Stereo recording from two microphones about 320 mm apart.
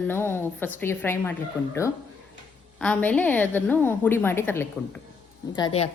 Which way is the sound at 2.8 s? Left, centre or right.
Centre.